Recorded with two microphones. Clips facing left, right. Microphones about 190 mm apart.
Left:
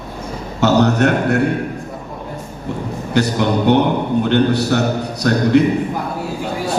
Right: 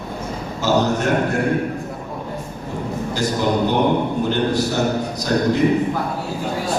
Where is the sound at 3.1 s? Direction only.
65° left (ahead or behind).